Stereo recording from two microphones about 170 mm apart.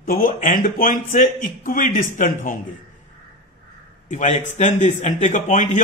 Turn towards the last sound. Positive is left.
turn(degrees=45)  # may be behind; listen again after turning